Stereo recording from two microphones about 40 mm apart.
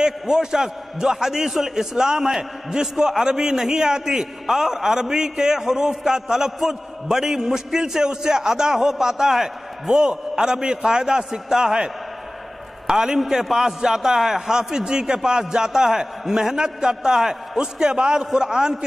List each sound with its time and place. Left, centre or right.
0.0 s a man's voice: centre